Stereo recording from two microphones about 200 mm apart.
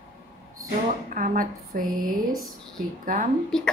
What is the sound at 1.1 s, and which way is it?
Speech, 40° right (ahead or behind).